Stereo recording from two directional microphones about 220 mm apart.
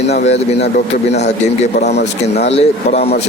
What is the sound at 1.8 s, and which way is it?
Speech, 50° left (ahead or behind).